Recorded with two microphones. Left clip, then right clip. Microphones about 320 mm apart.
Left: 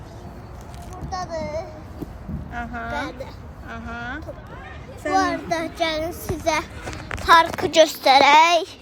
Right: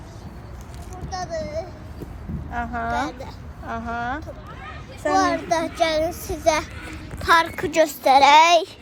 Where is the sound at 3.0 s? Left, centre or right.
Centre.